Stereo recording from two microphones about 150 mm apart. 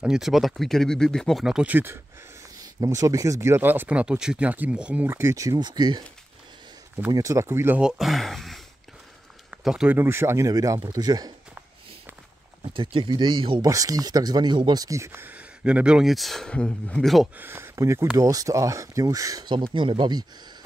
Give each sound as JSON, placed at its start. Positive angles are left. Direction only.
{"t": 0.0, "sound": "speech", "side_deg": -5}
{"t": 2.6, "sound": "speech", "side_deg": -25}
{"t": 7.1, "sound": "speech", "side_deg": -20}
{"t": 12.9, "sound": "speech", "side_deg": -30}
{"t": 17.4, "sound": "speech", "side_deg": -15}